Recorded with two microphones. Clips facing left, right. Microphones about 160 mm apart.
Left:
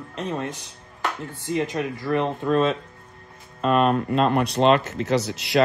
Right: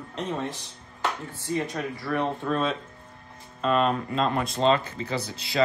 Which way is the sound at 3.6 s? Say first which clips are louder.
Left 4 dB; 55° left (ahead or behind).